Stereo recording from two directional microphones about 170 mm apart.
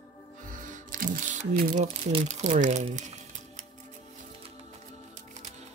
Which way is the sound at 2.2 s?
45° right (ahead or behind).